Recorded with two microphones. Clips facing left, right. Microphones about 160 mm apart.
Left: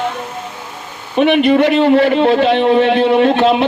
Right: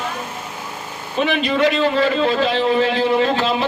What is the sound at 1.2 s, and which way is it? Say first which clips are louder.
A man's voice: left 7 dB; 65° left (ahead or behind).